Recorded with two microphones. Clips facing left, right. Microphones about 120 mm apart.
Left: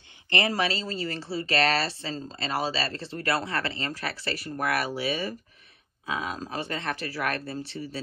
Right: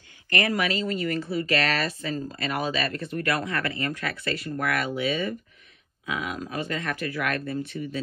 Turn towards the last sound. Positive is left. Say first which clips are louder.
# right 4 dB
turn(degrees=35)  # may be behind; listen again after turning